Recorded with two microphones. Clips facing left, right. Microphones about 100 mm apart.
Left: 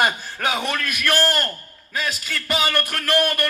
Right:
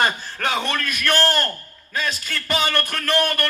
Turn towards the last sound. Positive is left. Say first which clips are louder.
# even
turn(degrees=5)  # may be behind; listen again after turning